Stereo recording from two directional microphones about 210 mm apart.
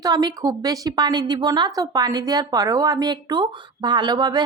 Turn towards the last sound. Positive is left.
turn(degrees=-20)  # may be behind; listen again after turning